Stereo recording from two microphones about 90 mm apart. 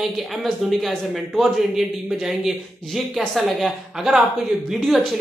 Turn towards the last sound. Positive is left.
turn(degrees=0)  # may be behind; listen again after turning